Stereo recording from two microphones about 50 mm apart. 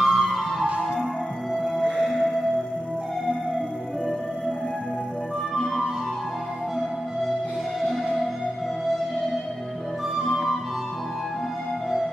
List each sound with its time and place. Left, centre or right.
0.0 s music: centre
1.9 s music: centre
5.5 s music: centre
7.9 s music: centre
10.2 s music: centre